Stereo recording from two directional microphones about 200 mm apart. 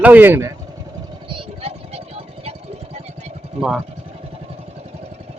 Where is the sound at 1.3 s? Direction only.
30° right (ahead or behind).